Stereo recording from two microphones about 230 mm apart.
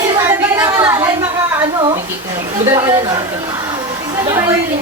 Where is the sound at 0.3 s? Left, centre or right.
Centre.